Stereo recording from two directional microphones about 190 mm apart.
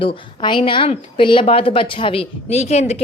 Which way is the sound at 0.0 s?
25° left (ahead or behind).